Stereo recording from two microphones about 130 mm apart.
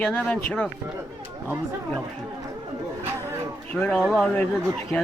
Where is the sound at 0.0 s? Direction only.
10° left (ahead or behind).